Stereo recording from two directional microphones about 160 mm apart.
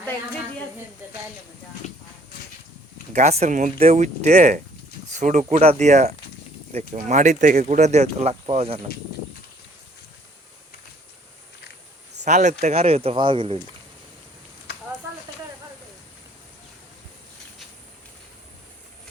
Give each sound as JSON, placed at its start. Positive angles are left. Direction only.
{"t": 3.1, "sound": "speech", "side_deg": -45}
{"t": 12.2, "sound": "speech", "side_deg": -50}